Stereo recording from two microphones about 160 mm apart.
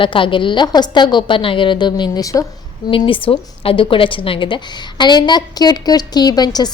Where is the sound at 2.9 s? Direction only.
35° left (ahead or behind).